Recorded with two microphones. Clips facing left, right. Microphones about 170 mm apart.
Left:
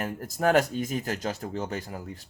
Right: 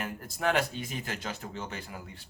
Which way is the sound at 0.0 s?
45° left (ahead or behind).